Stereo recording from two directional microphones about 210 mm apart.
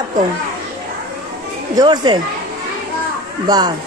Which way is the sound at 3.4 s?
20° right (ahead or behind).